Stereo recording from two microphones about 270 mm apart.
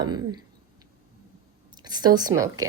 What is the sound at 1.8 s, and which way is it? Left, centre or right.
Speech, centre.